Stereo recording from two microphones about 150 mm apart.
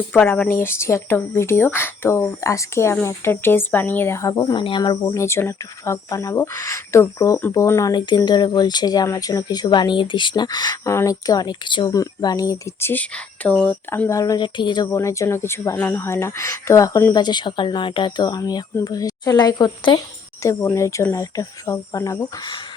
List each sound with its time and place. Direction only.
0.1 s speech: 10° left (ahead or behind); by 4.9 s 30° left (ahead or behind)
5.0 s speech: 15° left (ahead or behind)
14.1 s speech: 20° left (ahead or behind)
14.8 s speech: 20° left (ahead or behind)